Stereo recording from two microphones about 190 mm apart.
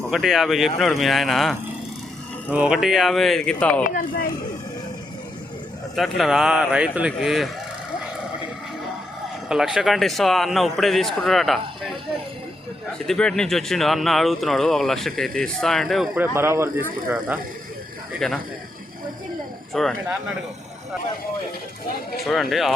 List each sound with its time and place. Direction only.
0.1 s speech: centre (ahead or behind)
3.8 s speech: 45° left (ahead or behind)
6.0 s speech: centre (ahead or behind)
9.5 s speech: 5° right (ahead or behind)
13.1 s speech: 5° left (ahead or behind)
19.7 s speech: centre (ahead or behind)
22.2 s speech: centre (ahead or behind)